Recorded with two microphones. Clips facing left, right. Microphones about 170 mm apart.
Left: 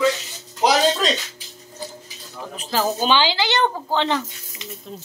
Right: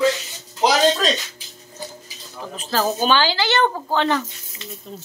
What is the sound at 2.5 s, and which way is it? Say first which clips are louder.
A woman's voice: right 1 dB; 15° left (ahead or behind).